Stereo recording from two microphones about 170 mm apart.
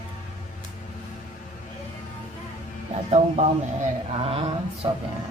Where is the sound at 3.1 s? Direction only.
40° right (ahead or behind).